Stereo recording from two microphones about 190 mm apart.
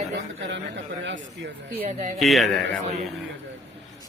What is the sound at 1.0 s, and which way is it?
Speech, 70° right (ahead or behind).